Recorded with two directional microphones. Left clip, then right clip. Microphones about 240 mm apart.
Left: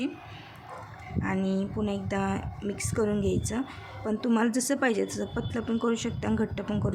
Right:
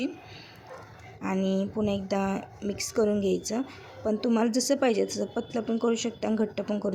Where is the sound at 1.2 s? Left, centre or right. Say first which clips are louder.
Right 2 dB; centre.